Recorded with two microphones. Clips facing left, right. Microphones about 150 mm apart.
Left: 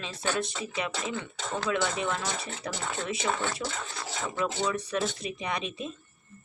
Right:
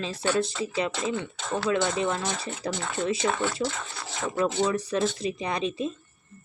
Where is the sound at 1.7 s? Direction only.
30° right (ahead or behind).